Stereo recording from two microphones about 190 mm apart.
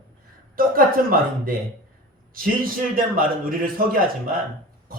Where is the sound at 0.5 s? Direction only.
50° right (ahead or behind).